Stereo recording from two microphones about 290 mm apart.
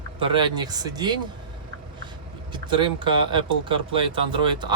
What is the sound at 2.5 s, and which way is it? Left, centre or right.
Speech, centre.